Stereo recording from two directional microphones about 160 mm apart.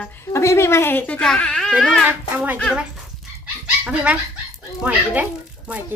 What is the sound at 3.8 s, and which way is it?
A woman's voice, 10° right (ahead or behind).